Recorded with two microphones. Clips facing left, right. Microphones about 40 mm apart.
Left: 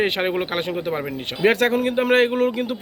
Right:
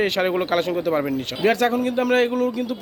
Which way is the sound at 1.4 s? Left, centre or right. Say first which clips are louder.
Left 2 dB; left.